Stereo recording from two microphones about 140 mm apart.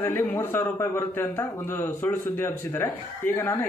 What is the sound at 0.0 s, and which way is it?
A man's voice, 15° left (ahead or behind).